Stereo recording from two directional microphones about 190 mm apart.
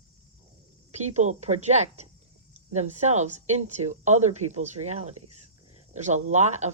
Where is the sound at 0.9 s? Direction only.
35° right (ahead or behind).